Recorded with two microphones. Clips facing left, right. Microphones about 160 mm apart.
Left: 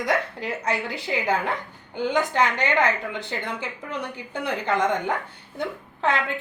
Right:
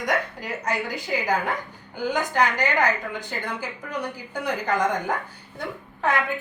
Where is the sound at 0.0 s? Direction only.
30° left (ahead or behind).